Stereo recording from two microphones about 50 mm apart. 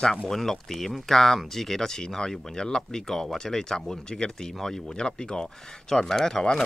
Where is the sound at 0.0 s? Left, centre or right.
Centre.